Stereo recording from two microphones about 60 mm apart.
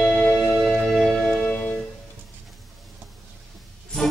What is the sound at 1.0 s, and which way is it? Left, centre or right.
Music, centre.